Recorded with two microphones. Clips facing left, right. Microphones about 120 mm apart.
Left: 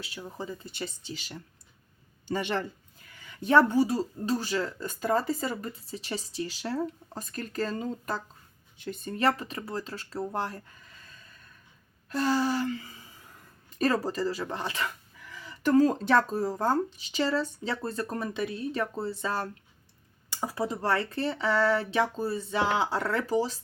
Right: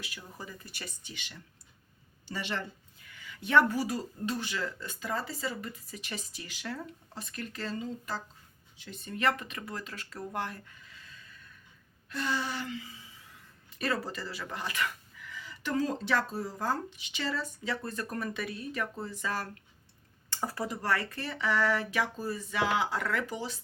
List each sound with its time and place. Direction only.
0.0 s speech: 30° left (ahead or behind)
2.2 s speech: 50° left (ahead or behind)
3.2 s speech: 35° left (ahead or behind)
5.8 s speech: 30° left (ahead or behind); by 9.1 s 50° left (ahead or behind)
9.1 s speech: 35° left (ahead or behind)
12.0 s a sound: 40° left (ahead or behind)
13.7 s speech: 40° left (ahead or behind)
20.3 s speech: 15° left (ahead or behind); by 23.6 s 35° left (ahead or behind)